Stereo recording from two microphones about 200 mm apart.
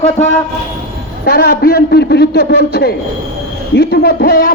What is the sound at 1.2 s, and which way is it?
A man's voice, 50° left (ahead or behind).